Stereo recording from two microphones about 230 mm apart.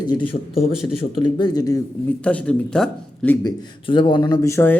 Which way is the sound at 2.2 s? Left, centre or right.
Centre.